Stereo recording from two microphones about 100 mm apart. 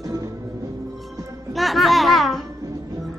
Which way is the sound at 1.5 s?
Centre (ahead or behind).